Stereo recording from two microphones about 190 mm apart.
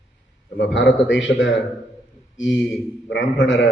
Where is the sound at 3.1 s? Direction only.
70° left (ahead or behind).